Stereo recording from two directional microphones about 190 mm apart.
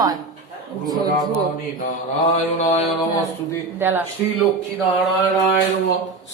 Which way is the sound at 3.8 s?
10° right (ahead or behind).